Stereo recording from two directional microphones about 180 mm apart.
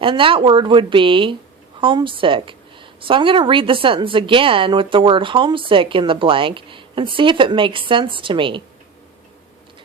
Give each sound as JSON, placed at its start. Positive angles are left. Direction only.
{"t": 0.0, "sound": "a woman's voice", "side_deg": -30}